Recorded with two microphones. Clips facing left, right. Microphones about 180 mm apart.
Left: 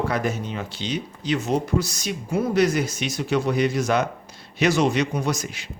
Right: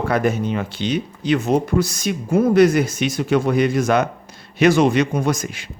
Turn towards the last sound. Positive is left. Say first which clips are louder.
# right 5 dB
turn(degrees=-50)  # may be behind; listen again after turning